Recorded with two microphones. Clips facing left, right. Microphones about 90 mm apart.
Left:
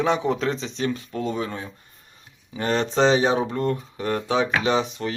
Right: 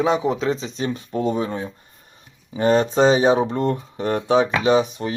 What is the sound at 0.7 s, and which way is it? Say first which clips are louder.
Speech: right 2 dB; 20° right (ahead or behind).